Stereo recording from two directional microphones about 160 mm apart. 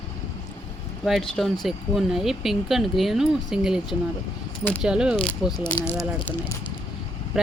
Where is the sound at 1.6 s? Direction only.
Centre (ahead or behind).